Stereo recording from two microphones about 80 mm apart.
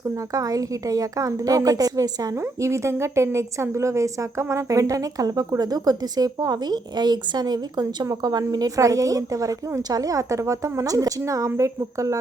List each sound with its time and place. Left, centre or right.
0.3 s a woman's voice: right
2.3 s a woman's voice: right
8.0 s a woman's voice: right